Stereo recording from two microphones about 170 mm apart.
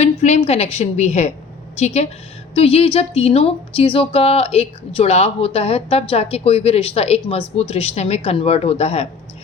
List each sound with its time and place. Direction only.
0.0 s speech: 40° left (ahead or behind)